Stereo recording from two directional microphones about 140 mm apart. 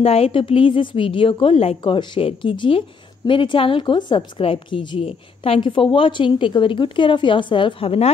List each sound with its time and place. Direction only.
0.0 s a woman's voice: 45° left (ahead or behind)